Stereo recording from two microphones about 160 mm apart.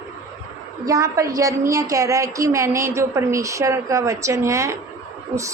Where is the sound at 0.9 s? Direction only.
20° right (ahead or behind).